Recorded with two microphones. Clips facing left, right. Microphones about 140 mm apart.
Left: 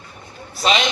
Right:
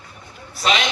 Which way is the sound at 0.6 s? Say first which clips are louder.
Left 2 dB; 25° left (ahead or behind).